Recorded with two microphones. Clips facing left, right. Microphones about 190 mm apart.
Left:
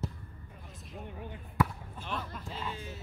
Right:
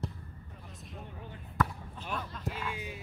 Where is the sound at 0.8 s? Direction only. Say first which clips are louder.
Left 2 dB; centre (ahead or behind).